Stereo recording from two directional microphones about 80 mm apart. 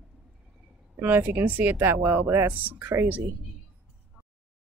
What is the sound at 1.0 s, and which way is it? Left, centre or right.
Speech, right.